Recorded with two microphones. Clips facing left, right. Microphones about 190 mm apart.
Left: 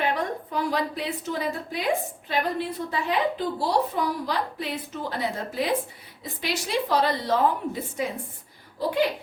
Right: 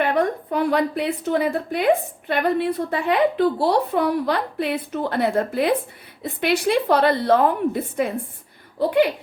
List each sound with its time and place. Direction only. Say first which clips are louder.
0.0 s a woman's voice: right 6 dB; 55° right (ahead or behind)